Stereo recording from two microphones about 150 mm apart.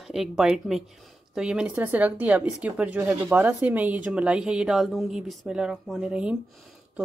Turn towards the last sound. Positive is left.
turn(degrees=-5)  # may be behind; listen again after turning